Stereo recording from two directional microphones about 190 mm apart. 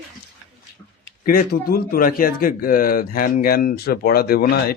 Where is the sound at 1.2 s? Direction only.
50° left (ahead or behind).